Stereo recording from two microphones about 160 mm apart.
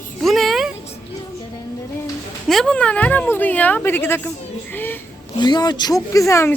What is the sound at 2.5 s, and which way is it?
Speech, 5° left (ahead or behind).